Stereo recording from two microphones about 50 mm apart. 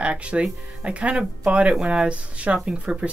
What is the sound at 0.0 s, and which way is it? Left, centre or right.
Speech, right.